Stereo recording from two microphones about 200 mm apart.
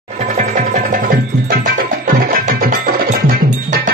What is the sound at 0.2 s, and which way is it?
Music, 35° right (ahead or behind).